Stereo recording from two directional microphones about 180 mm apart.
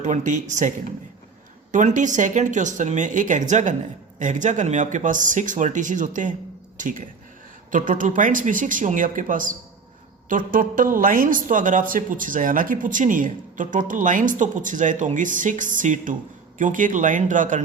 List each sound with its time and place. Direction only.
0.0 s speech: 45° right (ahead or behind)
1.7 s speech: 45° right (ahead or behind)
7.7 s speech: 50° right (ahead or behind)